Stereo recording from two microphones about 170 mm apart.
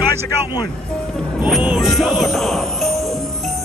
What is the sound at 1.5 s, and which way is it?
Music, 5° right (ahead or behind).